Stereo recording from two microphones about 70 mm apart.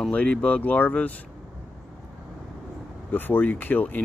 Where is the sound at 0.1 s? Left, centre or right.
Centre.